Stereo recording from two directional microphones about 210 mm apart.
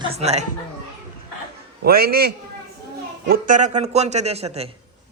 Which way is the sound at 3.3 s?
35° right (ahead or behind).